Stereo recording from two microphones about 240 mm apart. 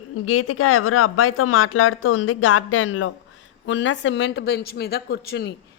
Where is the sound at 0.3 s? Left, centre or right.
Left.